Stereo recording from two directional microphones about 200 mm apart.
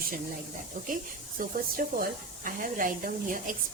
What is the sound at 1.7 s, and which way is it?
Speech, 45° right (ahead or behind).